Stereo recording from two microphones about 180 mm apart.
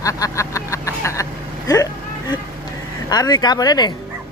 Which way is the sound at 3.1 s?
20° left (ahead or behind).